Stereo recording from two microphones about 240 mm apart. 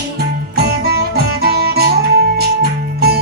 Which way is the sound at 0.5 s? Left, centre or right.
Right.